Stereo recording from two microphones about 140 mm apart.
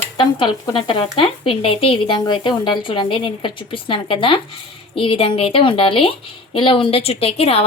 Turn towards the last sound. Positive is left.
turn(degrees=45)  # may be behind; listen again after turning